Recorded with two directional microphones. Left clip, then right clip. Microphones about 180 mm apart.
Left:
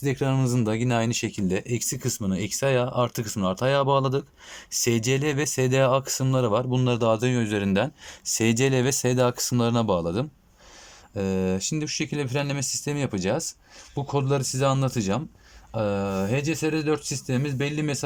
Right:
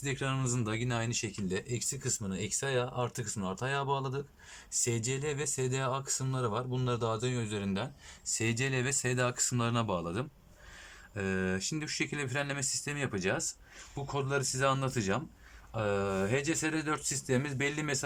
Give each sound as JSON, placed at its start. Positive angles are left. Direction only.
{"t": 0.0, "sound": "speech", "side_deg": 30}